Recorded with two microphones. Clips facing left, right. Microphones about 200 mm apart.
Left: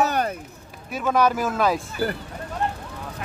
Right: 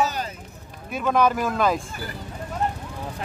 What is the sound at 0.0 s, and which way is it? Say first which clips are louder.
Run: left 3 dB; 60° left (ahead or behind).